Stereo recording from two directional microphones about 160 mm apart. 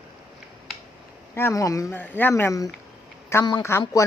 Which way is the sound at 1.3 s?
15° left (ahead or behind).